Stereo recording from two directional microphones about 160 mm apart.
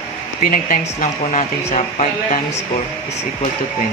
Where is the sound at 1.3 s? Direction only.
45° left (ahead or behind).